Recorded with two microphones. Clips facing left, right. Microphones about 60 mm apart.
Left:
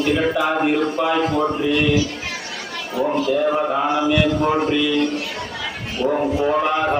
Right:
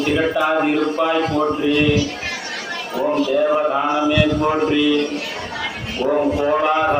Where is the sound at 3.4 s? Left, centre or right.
Centre.